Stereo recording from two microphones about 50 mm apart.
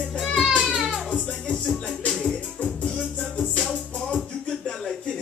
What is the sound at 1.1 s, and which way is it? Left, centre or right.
Music, centre.